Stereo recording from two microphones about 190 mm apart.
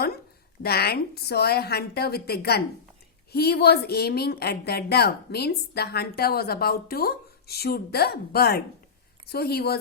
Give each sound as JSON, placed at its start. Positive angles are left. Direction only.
{"t": 0.6, "sound": "speech", "side_deg": 55}